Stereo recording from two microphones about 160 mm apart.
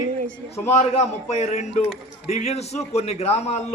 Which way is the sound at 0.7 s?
45° left (ahead or behind).